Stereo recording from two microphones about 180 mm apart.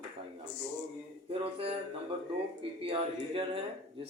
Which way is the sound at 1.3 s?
30° right (ahead or behind).